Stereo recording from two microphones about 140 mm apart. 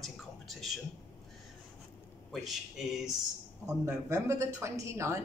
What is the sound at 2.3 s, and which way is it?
Speech, centre (ahead or behind).